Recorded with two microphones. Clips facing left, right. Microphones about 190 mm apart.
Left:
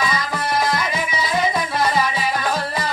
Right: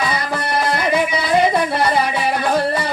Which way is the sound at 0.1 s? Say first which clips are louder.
Right 2 dB; 60° right (ahead or behind).